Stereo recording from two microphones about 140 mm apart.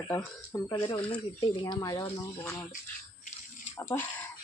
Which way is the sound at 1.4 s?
30° left (ahead or behind).